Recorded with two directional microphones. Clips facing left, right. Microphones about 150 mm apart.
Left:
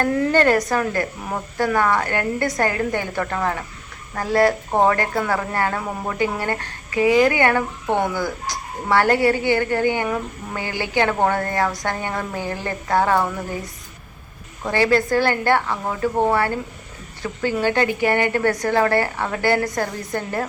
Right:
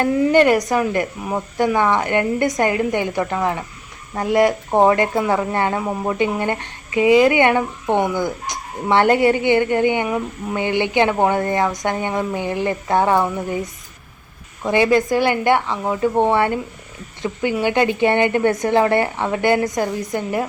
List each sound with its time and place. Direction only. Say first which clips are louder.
0.0 s speech: right 3 dB; 15° right (ahead or behind)
14.7 s a woman's voice: right 2 dB; 15° right (ahead or behind)